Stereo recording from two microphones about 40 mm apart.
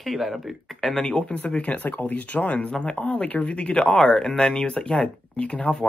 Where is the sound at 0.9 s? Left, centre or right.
Centre.